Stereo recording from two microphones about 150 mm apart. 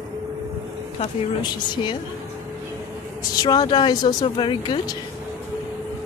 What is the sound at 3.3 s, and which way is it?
Speech, 25° left (ahead or behind).